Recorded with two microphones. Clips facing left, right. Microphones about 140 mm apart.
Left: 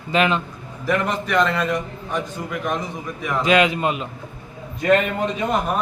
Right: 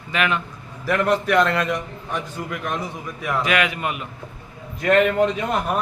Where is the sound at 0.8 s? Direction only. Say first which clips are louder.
Right 2 dB; 5° right (ahead or behind).